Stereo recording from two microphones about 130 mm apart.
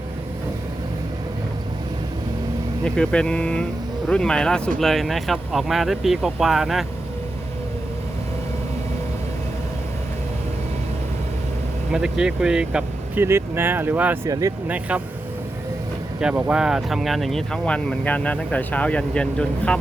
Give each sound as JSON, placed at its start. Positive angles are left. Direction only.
{"t": 2.8, "sound": "speech", "side_deg": 5}
{"t": 11.9, "sound": "speech", "side_deg": -5}
{"t": 13.1, "sound": "speech", "side_deg": -20}
{"t": 14.3, "sound": "speech", "side_deg": -25}
{"t": 14.7, "sound": "speech", "side_deg": -10}
{"t": 16.2, "sound": "speech", "side_deg": -5}